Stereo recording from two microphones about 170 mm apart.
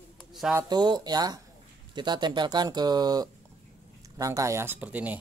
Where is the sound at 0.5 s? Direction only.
25° right (ahead or behind); by 5.2 s 10° right (ahead or behind).